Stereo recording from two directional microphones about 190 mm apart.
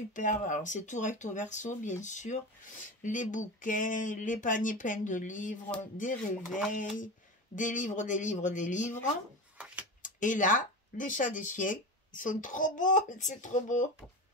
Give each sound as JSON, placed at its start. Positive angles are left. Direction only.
{"t": 0.1, "sound": "speech", "side_deg": 40}
{"t": 7.5, "sound": "speech", "side_deg": 45}
{"t": 10.0, "sound": "speech", "side_deg": 45}